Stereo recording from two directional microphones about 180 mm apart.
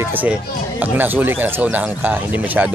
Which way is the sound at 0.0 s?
10° right (ahead or behind).